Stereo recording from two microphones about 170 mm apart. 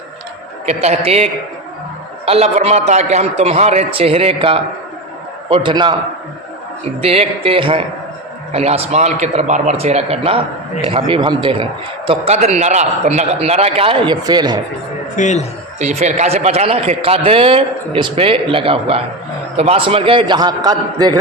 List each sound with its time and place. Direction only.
0.6 s a man's voice: 40° right (ahead or behind)
7.0 s a man's voice: 35° right (ahead or behind)
15.1 s a man's voice: 45° left (ahead or behind)
15.8 s a man's voice: 45° right (ahead or behind); by 21.1 s 25° right (ahead or behind)